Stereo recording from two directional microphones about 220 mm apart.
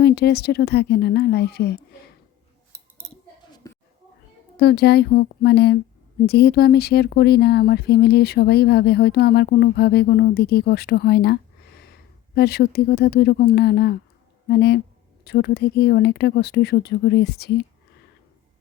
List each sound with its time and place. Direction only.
0.0 s speech: 50° left (ahead or behind)
3.6 s a sound: 15° left (ahead or behind)
4.5 s speech: 50° left (ahead or behind)